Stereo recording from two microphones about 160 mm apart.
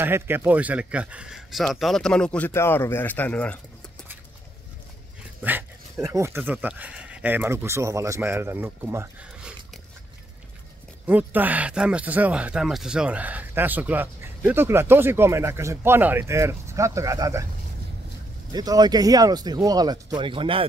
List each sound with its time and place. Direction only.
0.0 s speech: 15° right (ahead or behind); by 3.5 s 10° left (ahead or behind)
5.4 s speech: 10° right (ahead or behind)
11.1 s speech: 10° right (ahead or behind)
18.5 s speech: 25° right (ahead or behind)